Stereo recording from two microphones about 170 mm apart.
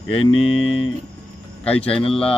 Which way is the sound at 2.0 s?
35° left (ahead or behind).